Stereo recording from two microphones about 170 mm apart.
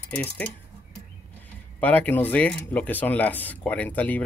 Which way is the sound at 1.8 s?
10° left (ahead or behind).